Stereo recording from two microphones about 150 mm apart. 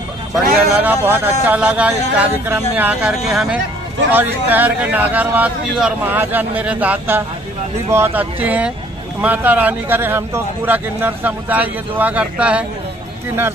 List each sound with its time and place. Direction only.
0.7 s speech: 15° right (ahead or behind)